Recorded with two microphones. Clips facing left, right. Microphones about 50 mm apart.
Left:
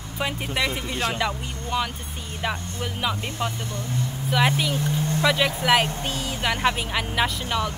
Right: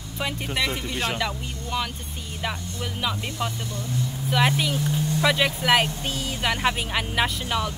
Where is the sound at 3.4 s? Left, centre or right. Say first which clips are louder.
Left 1 dB; centre.